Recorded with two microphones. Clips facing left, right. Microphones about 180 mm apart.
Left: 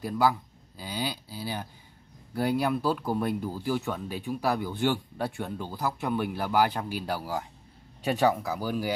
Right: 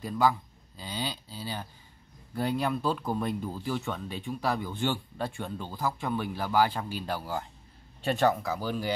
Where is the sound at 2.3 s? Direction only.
10° left (ahead or behind).